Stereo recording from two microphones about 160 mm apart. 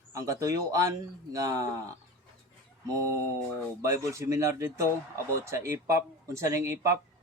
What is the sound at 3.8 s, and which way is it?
Speech, 20° right (ahead or behind).